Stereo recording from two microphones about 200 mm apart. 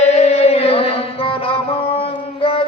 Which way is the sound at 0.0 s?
35° left (ahead or behind).